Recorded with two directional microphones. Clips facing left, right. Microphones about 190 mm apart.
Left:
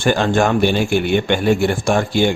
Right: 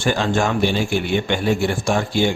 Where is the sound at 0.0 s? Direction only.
55° left (ahead or behind).